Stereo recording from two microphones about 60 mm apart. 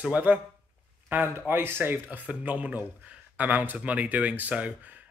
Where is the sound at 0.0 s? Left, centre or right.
Right.